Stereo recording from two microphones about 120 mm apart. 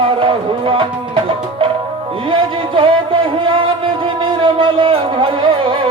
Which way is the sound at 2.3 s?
45° right (ahead or behind).